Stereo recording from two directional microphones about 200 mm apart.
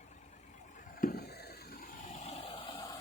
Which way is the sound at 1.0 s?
45° left (ahead or behind).